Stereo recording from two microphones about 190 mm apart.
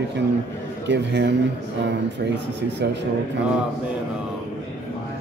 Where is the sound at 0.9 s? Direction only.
65° right (ahead or behind).